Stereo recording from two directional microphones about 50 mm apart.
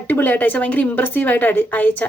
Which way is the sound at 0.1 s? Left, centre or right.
Left.